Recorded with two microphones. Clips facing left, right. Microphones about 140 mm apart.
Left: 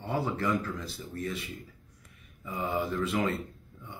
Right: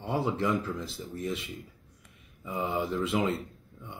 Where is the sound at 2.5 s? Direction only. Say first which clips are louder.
Right 1 dB; 25° right (ahead or behind).